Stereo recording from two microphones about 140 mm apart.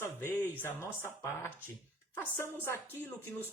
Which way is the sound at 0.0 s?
15° left (ahead or behind).